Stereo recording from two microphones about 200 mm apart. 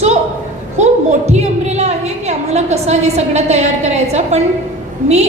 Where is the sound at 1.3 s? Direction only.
35° right (ahead or behind).